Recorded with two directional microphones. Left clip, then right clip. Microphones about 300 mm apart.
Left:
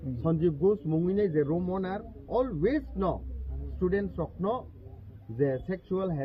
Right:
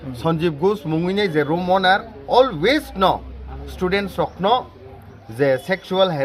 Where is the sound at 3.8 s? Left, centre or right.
Right.